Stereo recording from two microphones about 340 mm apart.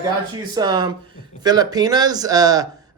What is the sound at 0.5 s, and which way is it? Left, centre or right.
Speech, centre.